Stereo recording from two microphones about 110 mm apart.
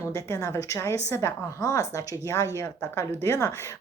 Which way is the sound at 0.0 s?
25° left (ahead or behind).